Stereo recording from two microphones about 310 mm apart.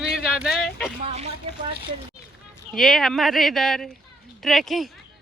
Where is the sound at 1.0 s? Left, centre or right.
Right.